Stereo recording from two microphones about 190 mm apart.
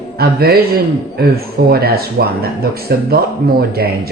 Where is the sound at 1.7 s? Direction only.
55° right (ahead or behind).